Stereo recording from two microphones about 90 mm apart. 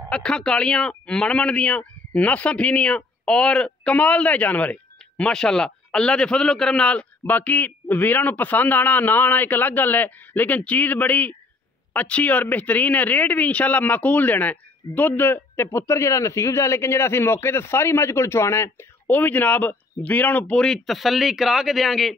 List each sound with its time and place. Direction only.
0.1 s speech: 10° left (ahead or behind)